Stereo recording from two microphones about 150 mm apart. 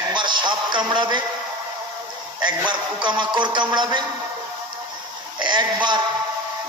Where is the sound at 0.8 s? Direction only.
30° right (ahead or behind).